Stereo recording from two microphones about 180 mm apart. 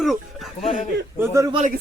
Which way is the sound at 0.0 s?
Centre (ahead or behind).